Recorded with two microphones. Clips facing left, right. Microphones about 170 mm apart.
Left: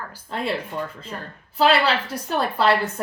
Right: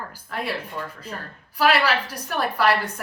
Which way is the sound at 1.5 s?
25° left (ahead or behind).